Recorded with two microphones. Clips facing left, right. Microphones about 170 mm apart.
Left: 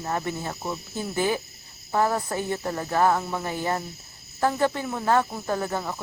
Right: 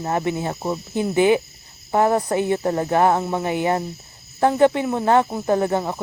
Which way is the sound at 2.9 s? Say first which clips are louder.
Right 3 dB; 20° right (ahead or behind).